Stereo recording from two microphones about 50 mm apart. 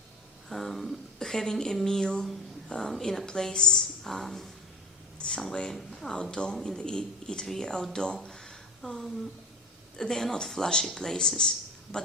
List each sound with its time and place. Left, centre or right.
0.4 s speech: centre
5.1 s a sound: left
5.4 s speech: centre